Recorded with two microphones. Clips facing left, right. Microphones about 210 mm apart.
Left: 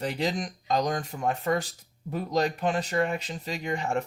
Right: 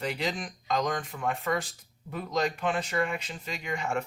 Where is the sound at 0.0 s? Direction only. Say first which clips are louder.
Left 3 dB; 40° left (ahead or behind).